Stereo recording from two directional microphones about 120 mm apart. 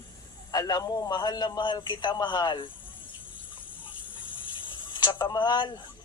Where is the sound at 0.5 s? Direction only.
30° left (ahead or behind).